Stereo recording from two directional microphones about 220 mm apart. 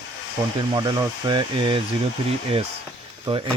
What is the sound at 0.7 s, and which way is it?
Speech, 20° right (ahead or behind).